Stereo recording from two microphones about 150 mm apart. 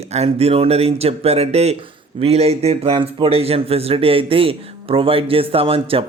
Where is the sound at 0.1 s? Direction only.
45° right (ahead or behind).